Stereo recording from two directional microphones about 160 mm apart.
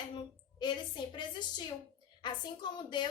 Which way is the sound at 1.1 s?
30° left (ahead or behind).